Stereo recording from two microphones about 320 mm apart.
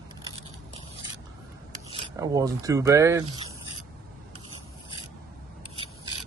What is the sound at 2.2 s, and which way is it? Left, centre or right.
Speech, centre.